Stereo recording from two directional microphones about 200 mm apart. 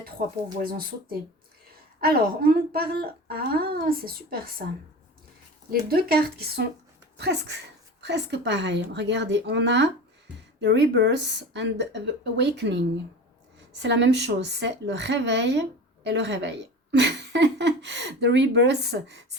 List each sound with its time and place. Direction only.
0.2 s speech: 40° right (ahead or behind)
2.0 s a woman's voice: 50° right (ahead or behind)
5.9 s a woman's voice: 50° right (ahead or behind)